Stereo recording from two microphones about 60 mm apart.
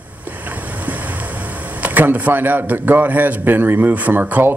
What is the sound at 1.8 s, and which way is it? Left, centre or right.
A man's voice, right.